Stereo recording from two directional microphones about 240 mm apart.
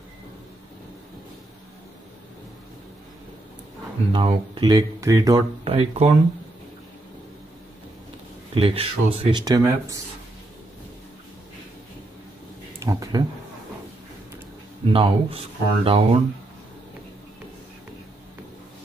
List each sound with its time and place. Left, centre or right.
4.1 s speech: right
8.5 s speech: right
12.7 s speech: centre
14.9 s speech: right